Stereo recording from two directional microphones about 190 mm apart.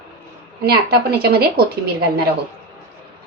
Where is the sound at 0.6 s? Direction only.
55° right (ahead or behind).